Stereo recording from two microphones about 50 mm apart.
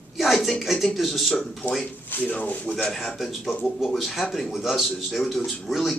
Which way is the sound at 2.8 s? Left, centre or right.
Centre.